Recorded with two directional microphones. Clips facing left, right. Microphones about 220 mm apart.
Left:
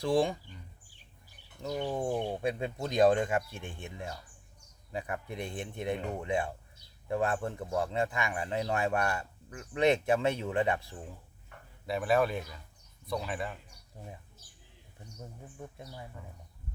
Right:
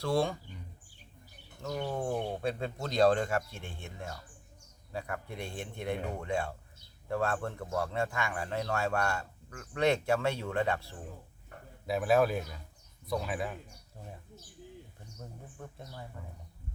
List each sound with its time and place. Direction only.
0.0 s speech: 15° left (ahead or behind)
1.6 s a man's voice: 15° left (ahead or behind)
11.9 s a man's voice: centre (ahead or behind)
15.2 s speech: 10° left (ahead or behind)